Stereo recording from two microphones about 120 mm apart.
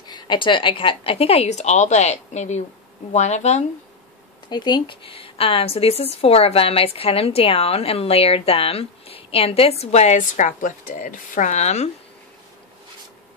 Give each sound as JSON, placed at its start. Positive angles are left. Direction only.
{"t": 0.0, "sound": "a woman's voice", "side_deg": 40}
{"t": 4.5, "sound": "speech", "side_deg": 35}